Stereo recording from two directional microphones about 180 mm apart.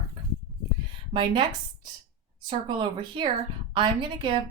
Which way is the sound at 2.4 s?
25° right (ahead or behind).